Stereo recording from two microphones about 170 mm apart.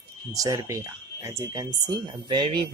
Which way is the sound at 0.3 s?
20° right (ahead or behind).